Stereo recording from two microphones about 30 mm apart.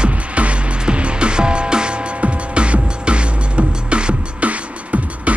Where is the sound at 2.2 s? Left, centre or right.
Right.